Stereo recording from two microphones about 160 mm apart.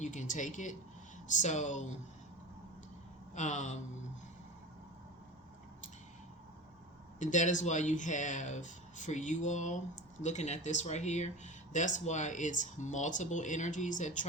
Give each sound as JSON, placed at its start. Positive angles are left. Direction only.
{"t": 0.0, "sound": "speech", "side_deg": 50}
{"t": 3.3, "sound": "speech", "side_deg": 50}
{"t": 7.2, "sound": "speech", "side_deg": 50}